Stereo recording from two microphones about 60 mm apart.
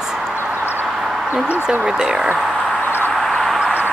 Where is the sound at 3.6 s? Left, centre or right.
Right.